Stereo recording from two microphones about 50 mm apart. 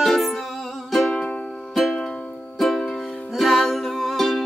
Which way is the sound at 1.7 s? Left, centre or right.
Centre.